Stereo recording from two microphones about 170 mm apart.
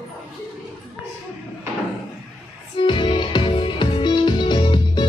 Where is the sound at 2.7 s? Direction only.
30° left (ahead or behind).